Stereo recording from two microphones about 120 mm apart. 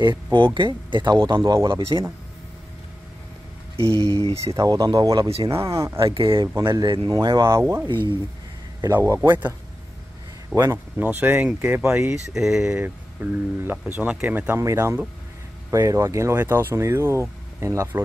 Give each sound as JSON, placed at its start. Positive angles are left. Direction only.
{"t": 0.0, "sound": "speech", "side_deg": -40}
{"t": 1.4, "sound": "speech", "side_deg": -25}
{"t": 3.9, "sound": "speech", "side_deg": 35}
{"t": 4.6, "sound": "speech", "side_deg": -30}
{"t": 5.3, "sound": "speech", "side_deg": -50}
{"t": 7.9, "sound": "speech", "side_deg": -40}
{"t": 8.8, "sound": "speech", "side_deg": -25}
{"t": 10.5, "sound": "speech", "side_deg": -20}
{"t": 12.1, "sound": "speech", "side_deg": -5}
{"t": 14.6, "sound": "speech", "side_deg": -25}